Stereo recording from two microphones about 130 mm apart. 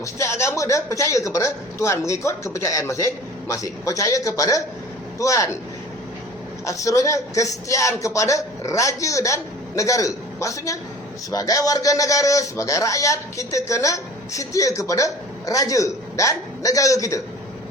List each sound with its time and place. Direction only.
0.0 s speech: 20° left (ahead or behind)
6.7 s speech: 25° left (ahead or behind)